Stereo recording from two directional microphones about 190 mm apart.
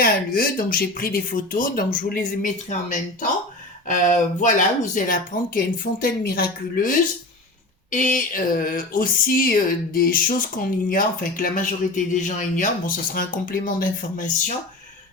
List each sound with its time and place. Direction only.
0.0 s speech: 50° left (ahead or behind)